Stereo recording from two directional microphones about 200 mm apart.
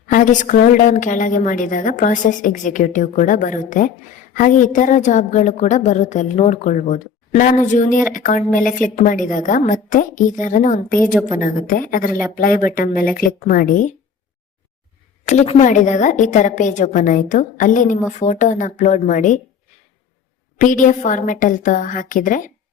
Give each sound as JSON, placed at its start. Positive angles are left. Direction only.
{"t": 0.1, "sound": "a woman's voice", "side_deg": 40}
{"t": 15.3, "sound": "a woman's voice", "side_deg": 35}
{"t": 20.6, "sound": "a woman's voice", "side_deg": 40}